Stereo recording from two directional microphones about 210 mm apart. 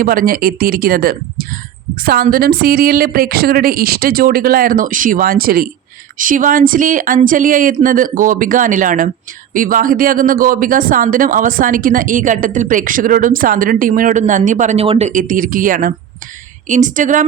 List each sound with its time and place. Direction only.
0.0 s speech: 40° right (ahead or behind)